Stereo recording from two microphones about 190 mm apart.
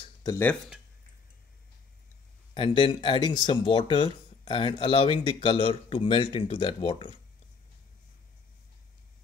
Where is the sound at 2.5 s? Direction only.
25° left (ahead or behind).